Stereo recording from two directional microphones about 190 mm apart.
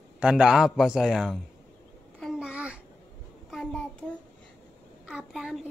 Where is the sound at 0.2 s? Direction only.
5° right (ahead or behind).